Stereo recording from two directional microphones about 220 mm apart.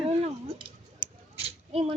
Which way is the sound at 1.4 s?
25° right (ahead or behind).